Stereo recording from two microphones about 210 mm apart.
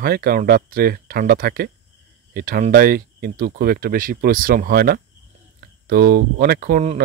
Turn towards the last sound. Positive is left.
turn(degrees=-45)  # may be behind; listen again after turning